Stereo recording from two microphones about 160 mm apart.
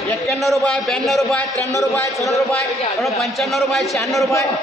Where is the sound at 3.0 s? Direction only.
Centre (ahead or behind).